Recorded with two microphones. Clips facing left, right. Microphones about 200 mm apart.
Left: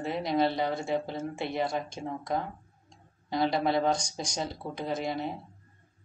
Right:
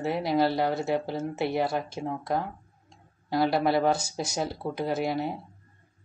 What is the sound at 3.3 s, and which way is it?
A woman's voice, 5° right (ahead or behind).